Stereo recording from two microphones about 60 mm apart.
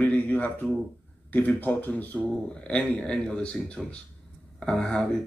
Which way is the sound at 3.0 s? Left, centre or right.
Centre.